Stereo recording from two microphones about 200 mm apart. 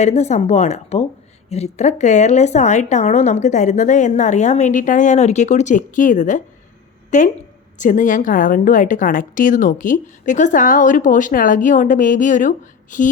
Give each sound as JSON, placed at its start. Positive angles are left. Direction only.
{"t": 0.0, "sound": "a woman's voice", "side_deg": 35}